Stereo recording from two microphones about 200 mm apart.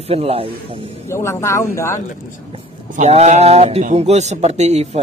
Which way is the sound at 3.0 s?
35° right (ahead or behind).